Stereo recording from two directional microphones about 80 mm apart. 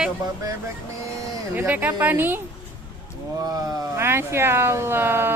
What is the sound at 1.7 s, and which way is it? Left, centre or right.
Speech, right.